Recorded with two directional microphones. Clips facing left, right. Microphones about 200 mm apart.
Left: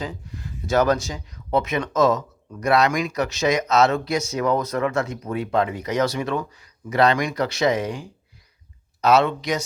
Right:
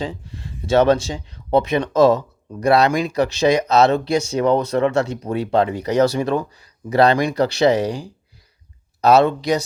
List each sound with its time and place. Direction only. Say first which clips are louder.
0.0 s speech: right 4 dB; 25° right (ahead or behind)